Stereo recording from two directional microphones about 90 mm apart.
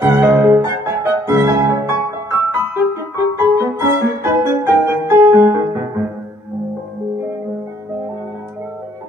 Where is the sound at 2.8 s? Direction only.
30° right (ahead or behind).